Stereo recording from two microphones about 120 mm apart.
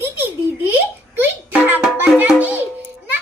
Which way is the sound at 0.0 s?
15° right (ahead or behind).